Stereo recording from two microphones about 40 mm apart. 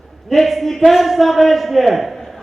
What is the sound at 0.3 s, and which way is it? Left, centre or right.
A man's voice, centre.